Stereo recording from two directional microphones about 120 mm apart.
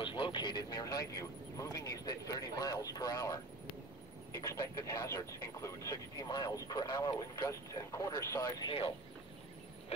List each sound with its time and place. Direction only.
0.0 s speech: 45° left (ahead or behind); by 8.6 s 30° left (ahead or behind)
8.6 s speech: 50° left (ahead or behind)